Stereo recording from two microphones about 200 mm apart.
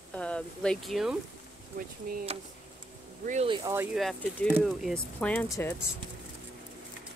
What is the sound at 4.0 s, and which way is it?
Speech, centre (ahead or behind).